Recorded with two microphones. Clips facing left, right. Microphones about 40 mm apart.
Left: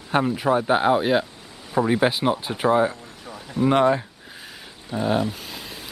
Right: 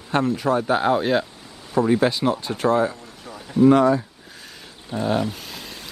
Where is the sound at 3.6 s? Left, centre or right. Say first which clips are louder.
Right 3 dB; left.